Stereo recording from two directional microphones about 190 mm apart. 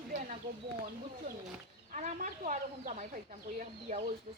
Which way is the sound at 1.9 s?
40° right (ahead or behind).